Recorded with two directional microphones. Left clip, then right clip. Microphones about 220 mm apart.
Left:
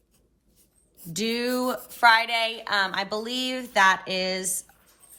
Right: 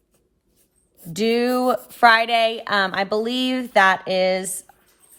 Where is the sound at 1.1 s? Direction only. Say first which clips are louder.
Right 7 dB; 45° right (ahead or behind).